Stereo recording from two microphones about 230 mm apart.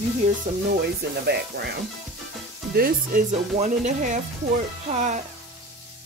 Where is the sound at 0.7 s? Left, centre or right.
Right.